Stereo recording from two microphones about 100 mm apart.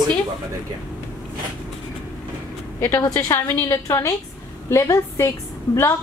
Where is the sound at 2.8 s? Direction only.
30° left (ahead or behind).